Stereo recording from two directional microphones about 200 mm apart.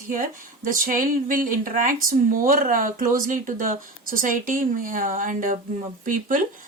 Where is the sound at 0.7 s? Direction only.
45° right (ahead or behind).